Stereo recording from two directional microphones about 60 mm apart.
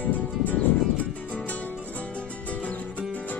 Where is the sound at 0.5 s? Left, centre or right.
Left.